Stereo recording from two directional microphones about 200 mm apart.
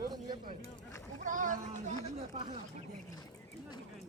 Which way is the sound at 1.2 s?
40° right (ahead or behind).